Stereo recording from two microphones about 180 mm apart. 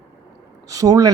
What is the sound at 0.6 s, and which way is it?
Speech, 20° right (ahead or behind).